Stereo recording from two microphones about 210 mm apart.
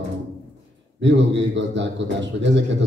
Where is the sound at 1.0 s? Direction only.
60° right (ahead or behind).